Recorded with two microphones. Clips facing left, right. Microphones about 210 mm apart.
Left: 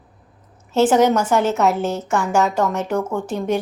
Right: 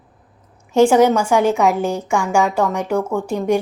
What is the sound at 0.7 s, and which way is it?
A woman's voice, 10° right (ahead or behind).